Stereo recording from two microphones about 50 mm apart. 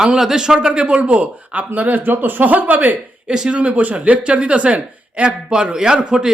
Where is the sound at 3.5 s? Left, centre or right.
Right.